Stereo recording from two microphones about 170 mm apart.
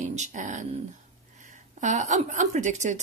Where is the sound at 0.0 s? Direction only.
45° right (ahead or behind).